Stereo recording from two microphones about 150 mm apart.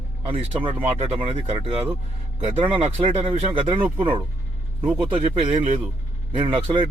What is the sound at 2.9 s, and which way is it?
Speech, 15° right (ahead or behind).